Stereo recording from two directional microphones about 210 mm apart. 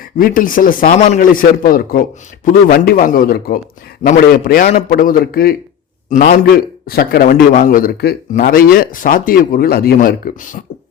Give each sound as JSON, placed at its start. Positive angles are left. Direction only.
{"t": 0.2, "sound": "a man's voice", "side_deg": 40}